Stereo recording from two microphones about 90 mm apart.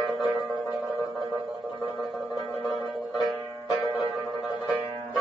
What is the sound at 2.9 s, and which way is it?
Music, centre (ahead or behind).